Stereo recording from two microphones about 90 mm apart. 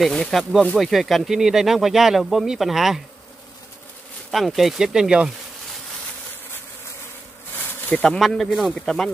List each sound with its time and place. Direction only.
0.0 s speech: 5° left (ahead or behind)
4.3 s speech: centre (ahead or behind)
7.9 s speech: 10° left (ahead or behind)